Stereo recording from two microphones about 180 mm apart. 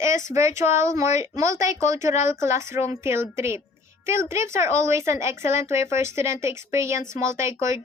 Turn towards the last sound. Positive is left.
turn(degrees=-15)  # may be behind; listen again after turning